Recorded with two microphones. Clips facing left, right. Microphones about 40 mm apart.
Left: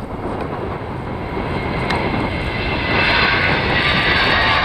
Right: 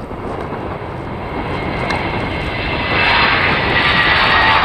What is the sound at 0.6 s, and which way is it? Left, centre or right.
Vehicle, centre.